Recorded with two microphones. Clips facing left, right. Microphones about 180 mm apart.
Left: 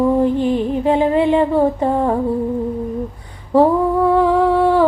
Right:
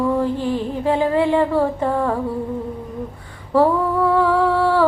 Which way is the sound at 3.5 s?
20° left (ahead or behind).